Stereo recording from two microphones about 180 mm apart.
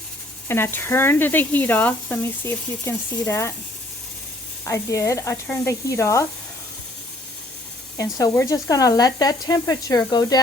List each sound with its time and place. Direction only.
0.4 s speech: 15° left (ahead or behind)
4.6 s speech: 15° left (ahead or behind)
7.9 s speech: 20° left (ahead or behind)